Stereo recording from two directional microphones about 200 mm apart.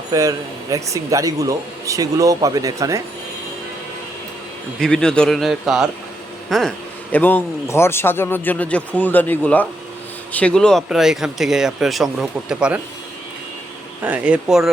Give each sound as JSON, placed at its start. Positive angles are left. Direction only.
{"t": 0.1, "sound": "a man's voice", "side_deg": -15}
{"t": 4.8, "sound": "speech", "side_deg": 5}
{"t": 14.0, "sound": "speech", "side_deg": -5}